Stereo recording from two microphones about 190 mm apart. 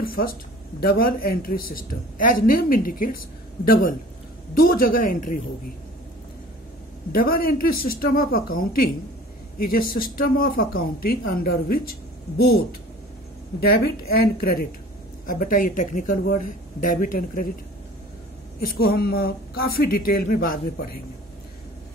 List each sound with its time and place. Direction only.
0.0 s speech: 50° left (ahead or behind)
7.1 s speech: 50° left (ahead or behind)
13.7 s speech: 55° left (ahead or behind)
18.6 s speech: 55° left (ahead or behind)